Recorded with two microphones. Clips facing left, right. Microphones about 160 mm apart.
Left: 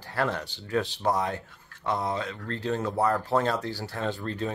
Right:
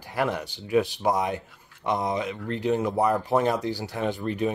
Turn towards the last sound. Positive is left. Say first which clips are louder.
# right 4 dB
turn(degrees=-15)  # may be behind; listen again after turning